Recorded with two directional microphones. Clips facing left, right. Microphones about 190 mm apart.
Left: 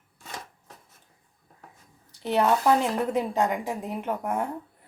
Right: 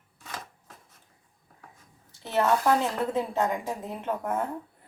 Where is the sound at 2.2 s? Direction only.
15° left (ahead or behind).